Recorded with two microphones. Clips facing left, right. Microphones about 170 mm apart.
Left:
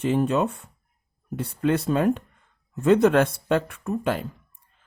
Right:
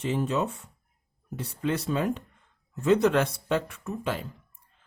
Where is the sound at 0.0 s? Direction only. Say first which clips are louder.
Left 5 dB; 55° left (ahead or behind).